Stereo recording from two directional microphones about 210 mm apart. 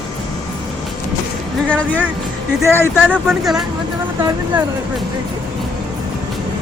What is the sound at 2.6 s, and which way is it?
Speech, 10° left (ahead or behind).